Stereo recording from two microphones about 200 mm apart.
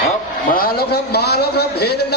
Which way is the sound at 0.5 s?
50° left (ahead or behind).